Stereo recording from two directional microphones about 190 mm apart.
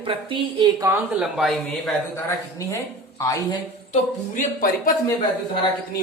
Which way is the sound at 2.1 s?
15° left (ahead or behind).